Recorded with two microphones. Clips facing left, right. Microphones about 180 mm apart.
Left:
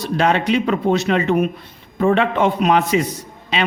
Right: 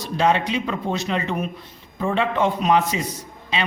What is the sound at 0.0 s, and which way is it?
A man's voice, 65° left (ahead or behind).